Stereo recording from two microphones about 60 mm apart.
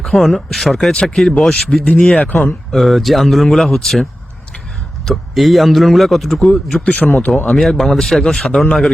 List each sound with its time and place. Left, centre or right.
0.0 s a man's voice: centre
2.7 s a man's voice: centre
5.0 s a man's voice: centre
6.8 s a man's voice: left
7.4 s a man's voice: centre